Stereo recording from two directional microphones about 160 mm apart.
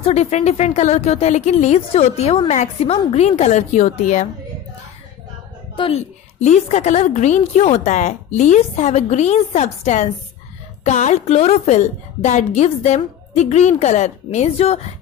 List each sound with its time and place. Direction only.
0.0 s speech: 40° left (ahead or behind)
6.4 s speech: 45° left (ahead or behind)